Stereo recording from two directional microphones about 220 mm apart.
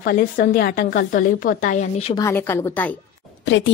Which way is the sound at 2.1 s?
15° left (ahead or behind).